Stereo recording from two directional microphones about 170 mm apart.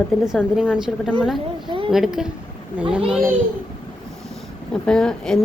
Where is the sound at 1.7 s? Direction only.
30° right (ahead or behind).